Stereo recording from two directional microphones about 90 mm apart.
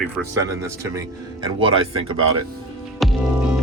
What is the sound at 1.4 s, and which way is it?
Speech, 80° right.